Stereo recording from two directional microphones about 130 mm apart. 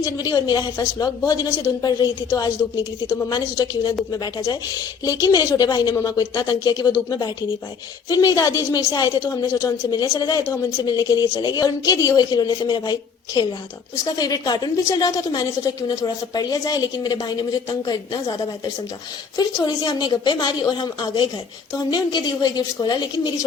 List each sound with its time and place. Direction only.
0.0 s a woman's voice: 30° left (ahead or behind)